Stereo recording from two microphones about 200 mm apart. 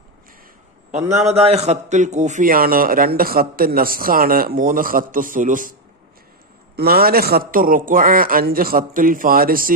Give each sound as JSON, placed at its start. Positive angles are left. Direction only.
{"t": 0.9, "sound": "a man's voice", "side_deg": -35}
{"t": 6.7, "sound": "a man's voice", "side_deg": -50}